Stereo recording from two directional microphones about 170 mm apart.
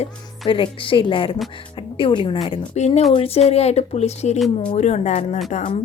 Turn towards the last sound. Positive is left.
turn(degrees=45)  # may be behind; listen again after turning